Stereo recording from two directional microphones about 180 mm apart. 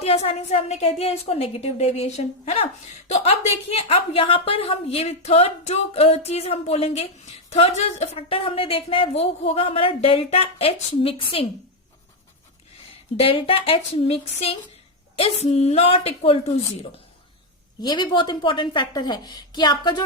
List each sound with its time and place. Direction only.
0.0 s a woman's voice: 35° left (ahead or behind)
13.1 s a woman's voice: 30° left (ahead or behind)
17.8 s a woman's voice: 25° left (ahead or behind)